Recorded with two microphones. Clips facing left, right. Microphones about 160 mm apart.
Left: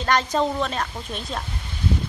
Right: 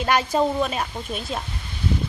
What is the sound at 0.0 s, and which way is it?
A woman's voice, 10° right (ahead or behind).